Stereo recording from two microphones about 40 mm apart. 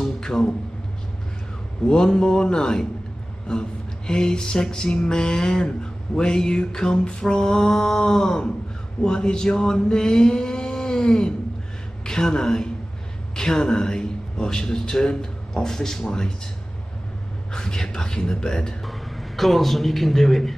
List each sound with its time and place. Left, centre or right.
0.0 s a sound: centre
1.9 s speech: centre
4.1 s mantra: centre
9.0 s a sound: centre
12.0 s a woman's voice: centre
17.5 s speech: centre
18.9 s a man's voice: centre